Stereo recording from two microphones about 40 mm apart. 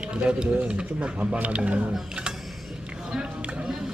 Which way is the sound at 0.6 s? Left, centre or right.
Right.